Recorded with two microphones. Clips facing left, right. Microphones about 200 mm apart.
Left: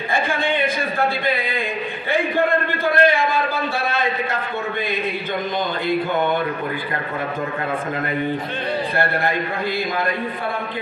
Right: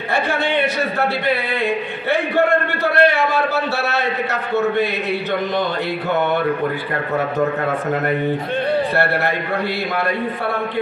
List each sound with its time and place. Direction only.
2.3 s a man's voice: 75° right (ahead or behind)